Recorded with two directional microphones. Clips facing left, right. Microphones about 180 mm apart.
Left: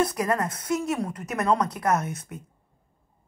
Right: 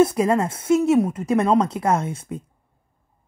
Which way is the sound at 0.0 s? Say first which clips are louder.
Right 7 dB; 25° right (ahead or behind).